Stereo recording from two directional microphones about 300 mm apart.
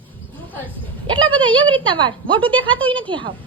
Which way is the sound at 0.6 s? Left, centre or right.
Centre.